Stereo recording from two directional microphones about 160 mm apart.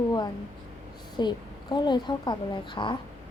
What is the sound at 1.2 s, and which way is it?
A woman's voice, 25° left (ahead or behind).